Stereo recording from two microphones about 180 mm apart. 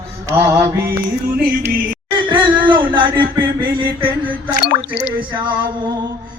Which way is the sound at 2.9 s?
25° right (ahead or behind).